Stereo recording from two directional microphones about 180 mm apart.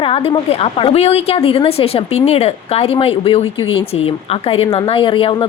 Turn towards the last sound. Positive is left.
turn(degrees=30)  # may be behind; listen again after turning